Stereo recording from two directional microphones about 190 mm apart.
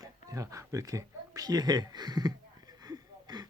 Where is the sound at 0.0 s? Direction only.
20° right (ahead or behind).